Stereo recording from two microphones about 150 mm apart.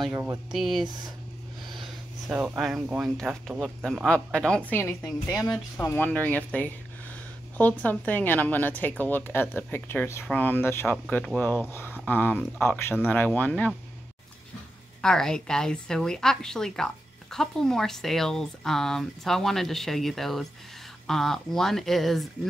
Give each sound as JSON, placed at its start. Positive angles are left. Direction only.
{"t": 0.1, "sound": "speech", "side_deg": -20}
{"t": 0.5, "sound": "a woman's voice", "side_deg": 0}
{"t": 2.2, "sound": "a woman's voice", "side_deg": -5}
{"t": 15.0, "sound": "a woman's voice", "side_deg": 5}